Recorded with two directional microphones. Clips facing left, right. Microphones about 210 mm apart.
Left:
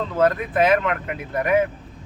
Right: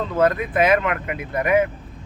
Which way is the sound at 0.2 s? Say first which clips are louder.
Even; 10° right (ahead or behind).